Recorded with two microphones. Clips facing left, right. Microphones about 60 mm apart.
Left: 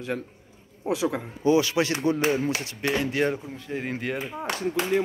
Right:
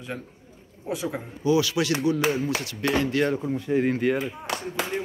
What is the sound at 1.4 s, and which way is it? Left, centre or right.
Speech, left.